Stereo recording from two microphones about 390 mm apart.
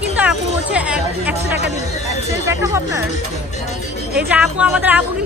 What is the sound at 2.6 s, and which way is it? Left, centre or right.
Speech, centre.